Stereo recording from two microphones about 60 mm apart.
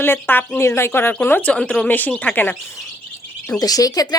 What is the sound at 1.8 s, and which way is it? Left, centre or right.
Speech, left.